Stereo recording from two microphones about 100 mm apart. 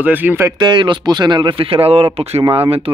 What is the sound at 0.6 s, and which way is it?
Speech, 50° right (ahead or behind).